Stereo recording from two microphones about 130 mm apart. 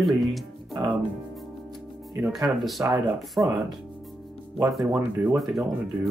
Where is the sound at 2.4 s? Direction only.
Centre (ahead or behind).